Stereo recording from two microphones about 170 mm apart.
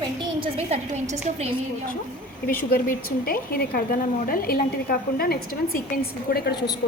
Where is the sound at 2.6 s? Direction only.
60° left (ahead or behind).